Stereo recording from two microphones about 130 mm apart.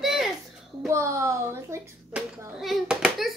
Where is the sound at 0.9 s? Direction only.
20° right (ahead or behind).